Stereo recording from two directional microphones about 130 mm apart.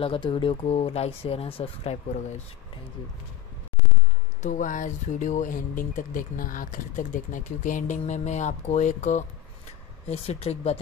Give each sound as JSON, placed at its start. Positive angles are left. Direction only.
{"t": 0.0, "sound": "speech", "side_deg": 45}
{"t": 4.4, "sound": "speech", "side_deg": 85}
{"t": 10.0, "sound": "speech", "side_deg": 55}